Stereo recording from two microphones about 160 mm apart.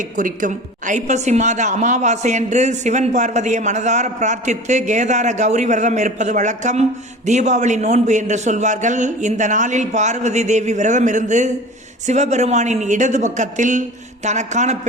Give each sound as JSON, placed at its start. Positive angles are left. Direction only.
{"t": 0.2, "sound": "a woman's voice", "side_deg": -55}